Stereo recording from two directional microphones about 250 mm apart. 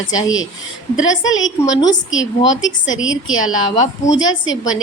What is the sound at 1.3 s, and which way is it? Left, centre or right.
A woman's voice, left.